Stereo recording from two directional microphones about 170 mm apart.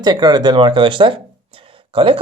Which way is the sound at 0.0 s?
25° right (ahead or behind).